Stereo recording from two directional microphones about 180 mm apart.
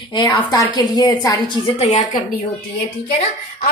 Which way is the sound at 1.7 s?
40° left (ahead or behind).